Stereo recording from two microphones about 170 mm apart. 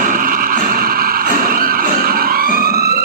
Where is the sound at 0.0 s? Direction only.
55° right (ahead or behind).